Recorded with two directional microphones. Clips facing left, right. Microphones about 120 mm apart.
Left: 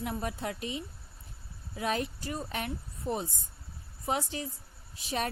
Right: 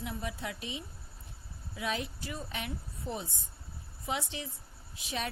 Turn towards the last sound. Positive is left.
turn(degrees=40)  # may be behind; listen again after turning